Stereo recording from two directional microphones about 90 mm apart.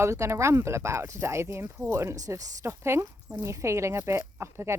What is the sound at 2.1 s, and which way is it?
Speech, 40° right (ahead or behind).